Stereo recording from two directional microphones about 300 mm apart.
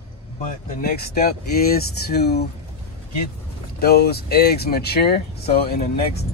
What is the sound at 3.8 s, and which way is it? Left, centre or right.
Speech, left.